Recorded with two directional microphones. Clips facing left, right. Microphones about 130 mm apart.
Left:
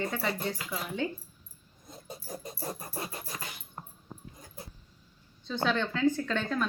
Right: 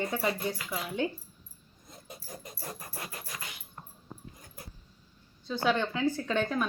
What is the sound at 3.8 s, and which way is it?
Dog, 35° left (ahead or behind).